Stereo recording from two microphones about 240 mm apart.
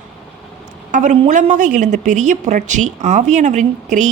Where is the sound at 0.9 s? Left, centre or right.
Right.